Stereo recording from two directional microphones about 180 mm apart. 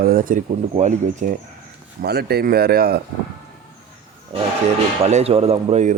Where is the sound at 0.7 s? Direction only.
40° right (ahead or behind).